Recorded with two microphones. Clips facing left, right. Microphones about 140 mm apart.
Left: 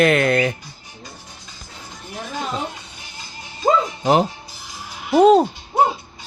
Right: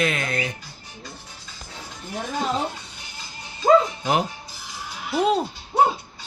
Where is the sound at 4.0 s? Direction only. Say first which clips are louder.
Left 6 dB; 25° left (ahead or behind).